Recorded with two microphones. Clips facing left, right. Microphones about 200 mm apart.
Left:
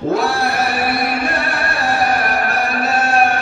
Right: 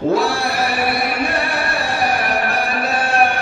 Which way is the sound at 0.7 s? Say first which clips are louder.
Left 1 dB; 55° left (ahead or behind).